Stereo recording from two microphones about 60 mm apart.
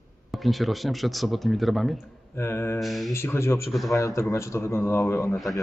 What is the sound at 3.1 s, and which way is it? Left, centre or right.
Speech, left.